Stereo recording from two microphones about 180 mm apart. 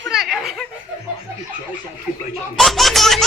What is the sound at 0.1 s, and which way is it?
Laughter, centre (ahead or behind).